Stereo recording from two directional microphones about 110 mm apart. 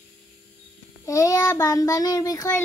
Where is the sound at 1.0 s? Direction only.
30° left (ahead or behind).